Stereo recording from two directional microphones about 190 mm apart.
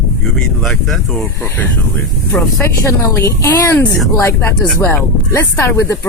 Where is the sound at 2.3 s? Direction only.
15° left (ahead or behind).